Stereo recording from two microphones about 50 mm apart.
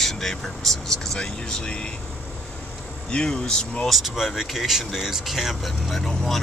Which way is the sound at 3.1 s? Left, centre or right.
Centre.